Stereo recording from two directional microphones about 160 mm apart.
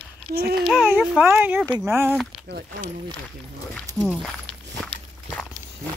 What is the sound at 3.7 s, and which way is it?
Speech, centre (ahead or behind).